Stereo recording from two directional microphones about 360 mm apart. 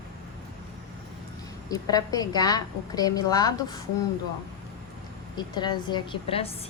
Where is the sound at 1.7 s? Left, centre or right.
Centre.